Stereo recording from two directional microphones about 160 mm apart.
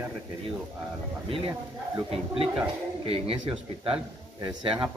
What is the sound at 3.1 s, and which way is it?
Speech, 35° right (ahead or behind).